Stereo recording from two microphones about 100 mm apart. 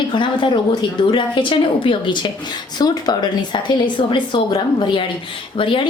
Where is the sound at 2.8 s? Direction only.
40° left (ahead or behind).